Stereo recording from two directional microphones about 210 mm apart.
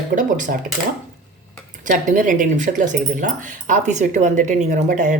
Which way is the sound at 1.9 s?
40° right (ahead or behind).